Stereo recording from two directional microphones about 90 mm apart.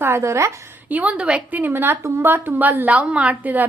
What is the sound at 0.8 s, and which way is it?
A woman's voice, 15° right (ahead or behind).